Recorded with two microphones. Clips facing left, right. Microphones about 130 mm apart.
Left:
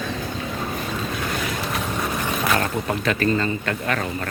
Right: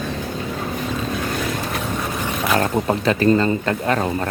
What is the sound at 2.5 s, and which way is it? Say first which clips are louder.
Speech: right 4 dB; 30° right (ahead or behind).